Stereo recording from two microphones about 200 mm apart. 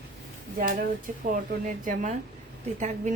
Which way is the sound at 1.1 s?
40° right (ahead or behind).